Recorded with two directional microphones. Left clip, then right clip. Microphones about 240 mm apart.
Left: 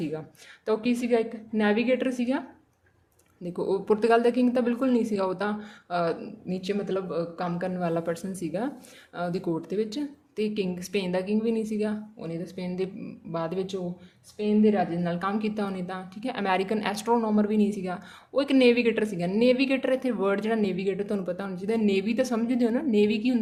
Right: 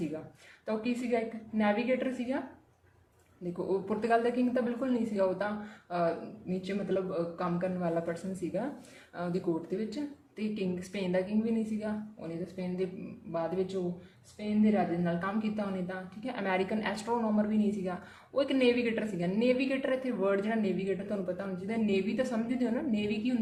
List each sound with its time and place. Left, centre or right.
0.6 s a woman's voice: left
3.7 s a woman's voice: left
6.5 s a woman's voice: left